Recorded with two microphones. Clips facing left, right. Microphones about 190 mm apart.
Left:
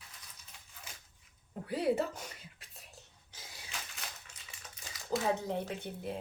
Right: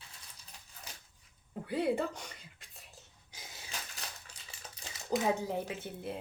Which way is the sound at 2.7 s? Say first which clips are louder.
Left 1 dB; centre (ahead or behind).